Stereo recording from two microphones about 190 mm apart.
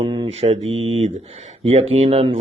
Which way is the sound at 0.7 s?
90° right.